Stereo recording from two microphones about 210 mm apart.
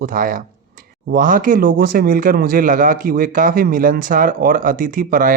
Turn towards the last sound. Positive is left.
turn(degrees=-40)  # may be behind; listen again after turning